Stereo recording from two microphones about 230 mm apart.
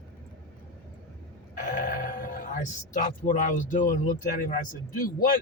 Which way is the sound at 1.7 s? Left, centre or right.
Left.